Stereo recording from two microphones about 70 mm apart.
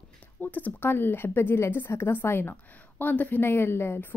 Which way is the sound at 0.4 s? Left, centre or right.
Left.